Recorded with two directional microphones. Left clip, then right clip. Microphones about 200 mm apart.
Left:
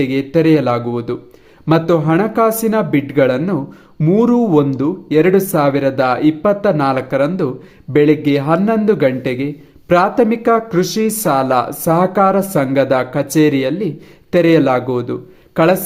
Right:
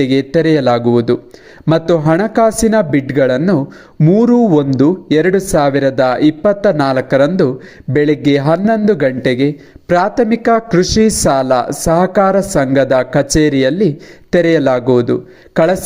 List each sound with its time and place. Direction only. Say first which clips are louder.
0.0 s a man's voice: right 2 dB; 25° right (ahead or behind)